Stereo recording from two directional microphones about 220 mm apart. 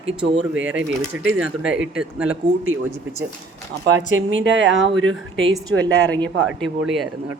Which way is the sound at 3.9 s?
55° right (ahead or behind).